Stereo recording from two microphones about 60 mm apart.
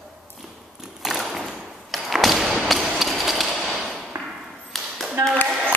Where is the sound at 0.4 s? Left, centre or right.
Centre.